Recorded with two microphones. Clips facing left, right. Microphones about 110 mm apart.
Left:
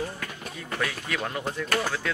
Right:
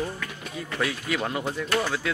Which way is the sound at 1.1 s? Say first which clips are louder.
Right 3 dB; 5° right (ahead or behind).